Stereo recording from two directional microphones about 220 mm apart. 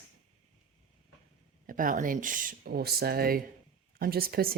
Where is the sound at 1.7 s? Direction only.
40° right (ahead or behind).